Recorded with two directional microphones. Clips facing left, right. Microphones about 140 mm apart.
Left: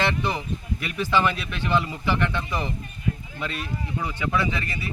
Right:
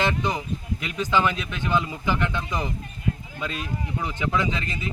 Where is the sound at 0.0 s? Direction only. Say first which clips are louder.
Even; 15° right (ahead or behind).